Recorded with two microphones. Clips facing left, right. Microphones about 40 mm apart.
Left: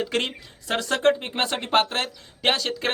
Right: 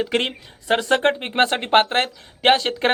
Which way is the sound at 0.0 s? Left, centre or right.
Right.